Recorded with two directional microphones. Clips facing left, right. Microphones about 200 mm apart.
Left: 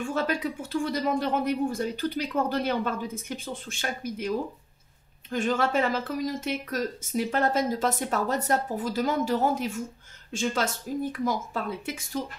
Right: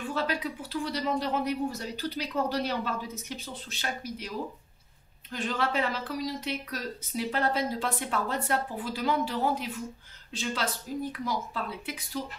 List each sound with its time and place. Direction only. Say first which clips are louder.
0.0 s speech: left 3 dB; 45° left (ahead or behind)
5.3 s speech: left 5 dB; 45° left (ahead or behind)